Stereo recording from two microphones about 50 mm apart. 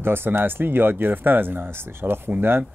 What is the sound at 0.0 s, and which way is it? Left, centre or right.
Speech, right.